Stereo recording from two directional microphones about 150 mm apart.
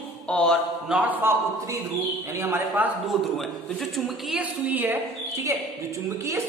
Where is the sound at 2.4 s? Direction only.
15° right (ahead or behind).